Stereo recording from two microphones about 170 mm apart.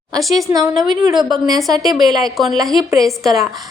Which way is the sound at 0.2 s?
Centre (ahead or behind).